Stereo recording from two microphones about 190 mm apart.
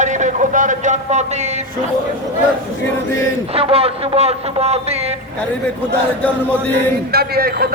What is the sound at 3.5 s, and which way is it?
A man's voice, 30° right (ahead or behind).